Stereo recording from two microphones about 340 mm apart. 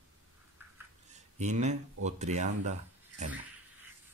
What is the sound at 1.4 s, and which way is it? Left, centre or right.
Speech, centre.